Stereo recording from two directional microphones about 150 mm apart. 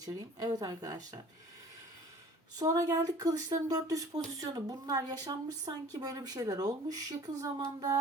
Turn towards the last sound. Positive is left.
turn(degrees=-25)  # may be behind; listen again after turning